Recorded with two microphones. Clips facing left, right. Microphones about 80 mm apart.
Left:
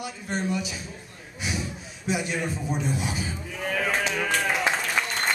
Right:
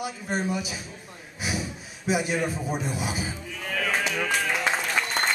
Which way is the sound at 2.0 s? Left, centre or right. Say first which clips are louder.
Right 2 dB; centre.